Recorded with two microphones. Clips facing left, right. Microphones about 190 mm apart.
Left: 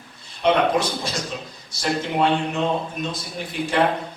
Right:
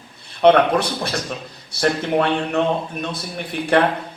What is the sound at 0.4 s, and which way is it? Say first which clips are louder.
A man's voice: right 5 dB; 60° right (ahead or behind).